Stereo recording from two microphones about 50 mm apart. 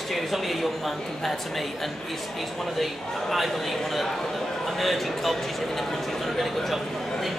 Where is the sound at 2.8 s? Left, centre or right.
Centre.